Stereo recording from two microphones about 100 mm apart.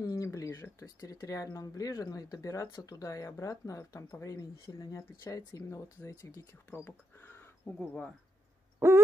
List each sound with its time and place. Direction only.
0.1 s a sound: 35° left (ahead or behind)
0.5 s speech: 30° left (ahead or behind)
6.7 s speech: 20° left (ahead or behind)
8.7 s owl: 25° right (ahead or behind)